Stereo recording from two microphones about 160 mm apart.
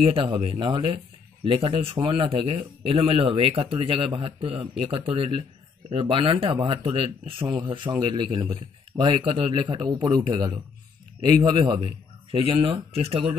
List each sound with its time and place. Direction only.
0.0 s a man's voice: 35° right (ahead or behind)